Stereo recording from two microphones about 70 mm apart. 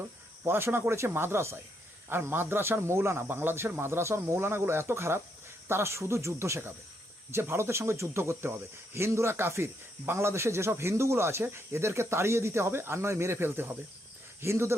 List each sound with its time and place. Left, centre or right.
0.4 s speech: right